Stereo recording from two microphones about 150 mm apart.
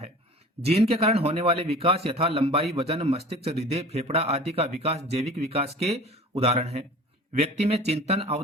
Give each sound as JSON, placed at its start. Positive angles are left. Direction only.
{"t": 0.6, "sound": "a man's voice", "side_deg": -45}